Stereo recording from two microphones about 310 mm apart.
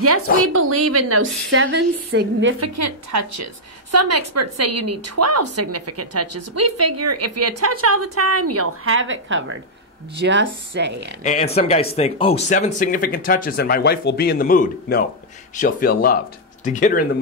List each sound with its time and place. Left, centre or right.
0.4 s a woman's voice: right
2.6 s a woman's voice: right
11.2 s speech: left